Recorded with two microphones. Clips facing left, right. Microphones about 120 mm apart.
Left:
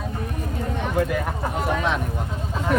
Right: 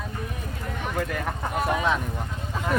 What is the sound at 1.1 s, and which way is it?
Speech, 5° left (ahead or behind).